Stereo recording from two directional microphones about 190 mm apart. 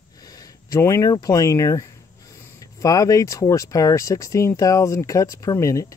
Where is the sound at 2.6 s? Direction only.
20° left (ahead or behind).